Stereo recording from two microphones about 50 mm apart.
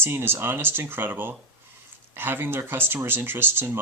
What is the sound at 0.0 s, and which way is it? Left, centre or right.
Speech, right.